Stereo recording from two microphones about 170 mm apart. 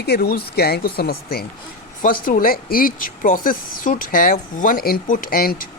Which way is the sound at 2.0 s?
55° left (ahead or behind).